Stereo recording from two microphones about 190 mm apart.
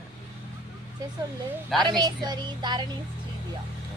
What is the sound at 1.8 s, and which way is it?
A woman's voice, 20° right (ahead or behind).